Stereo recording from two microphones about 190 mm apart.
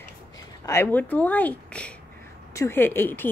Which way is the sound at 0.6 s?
15° left (ahead or behind).